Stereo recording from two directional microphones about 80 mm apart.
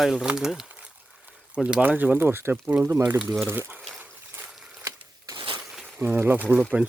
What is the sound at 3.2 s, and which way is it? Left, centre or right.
Speech, centre.